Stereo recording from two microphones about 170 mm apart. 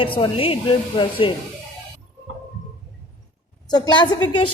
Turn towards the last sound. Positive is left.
turn(degrees=25)  # may be behind; listen again after turning